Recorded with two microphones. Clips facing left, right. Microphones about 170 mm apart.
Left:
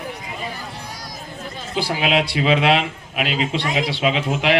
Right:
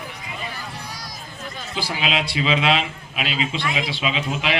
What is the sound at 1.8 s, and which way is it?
A man's voice, 55° left (ahead or behind).